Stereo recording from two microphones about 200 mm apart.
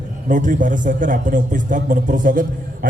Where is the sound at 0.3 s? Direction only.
40° right (ahead or behind).